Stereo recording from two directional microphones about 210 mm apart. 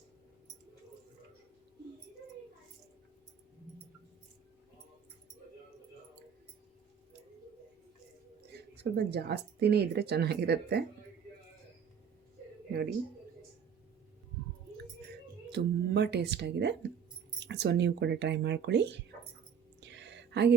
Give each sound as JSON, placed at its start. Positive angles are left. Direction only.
{"t": 8.4, "sound": "speech", "side_deg": -50}
{"t": 15.5, "sound": "speech", "side_deg": -55}
{"t": 19.8, "sound": "a sound", "side_deg": -55}